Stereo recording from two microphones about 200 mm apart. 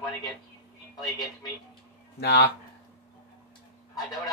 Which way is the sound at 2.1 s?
60° left (ahead or behind).